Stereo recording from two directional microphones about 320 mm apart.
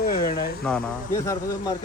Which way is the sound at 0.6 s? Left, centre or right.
Centre.